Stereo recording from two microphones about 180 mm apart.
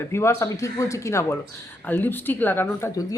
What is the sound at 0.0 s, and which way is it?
Speech, 15° left (ahead or behind).